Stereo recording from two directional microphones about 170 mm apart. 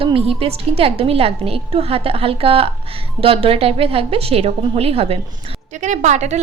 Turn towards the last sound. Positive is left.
turn(degrees=-45)  # may be behind; listen again after turning